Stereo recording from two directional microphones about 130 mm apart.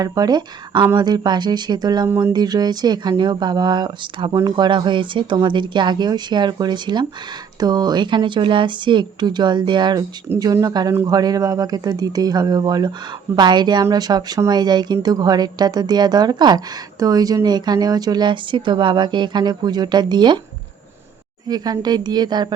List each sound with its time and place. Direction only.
0.0 s a woman's voice: 30° right (ahead or behind)
21.4 s a woman's voice: 30° right (ahead or behind)